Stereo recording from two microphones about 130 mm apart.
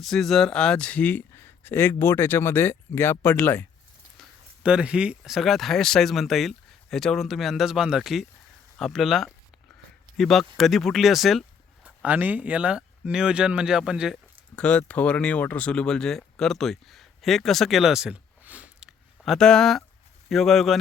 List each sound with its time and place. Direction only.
0.0 s speech: centre (ahead or behind)
4.6 s speech: 5° right (ahead or behind)
12.0 s speech: 10° right (ahead or behind)
14.5 s speech: 10° left (ahead or behind)